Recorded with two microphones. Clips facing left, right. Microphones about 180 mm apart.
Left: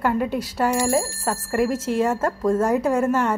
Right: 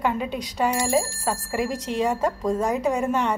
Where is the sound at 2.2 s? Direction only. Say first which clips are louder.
Left 3 dB; 15° right (ahead or behind).